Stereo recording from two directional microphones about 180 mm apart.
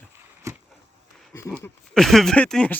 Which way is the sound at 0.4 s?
15° right (ahead or behind).